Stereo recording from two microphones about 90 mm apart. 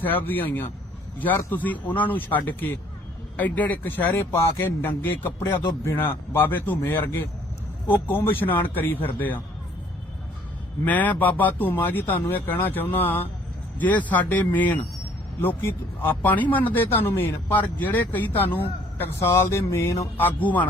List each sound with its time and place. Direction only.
0.0 s speech: 20° left (ahead or behind)
10.8 s speech: 20° left (ahead or behind)